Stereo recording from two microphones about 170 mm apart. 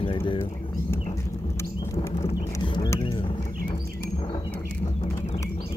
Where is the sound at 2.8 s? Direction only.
25° left (ahead or behind).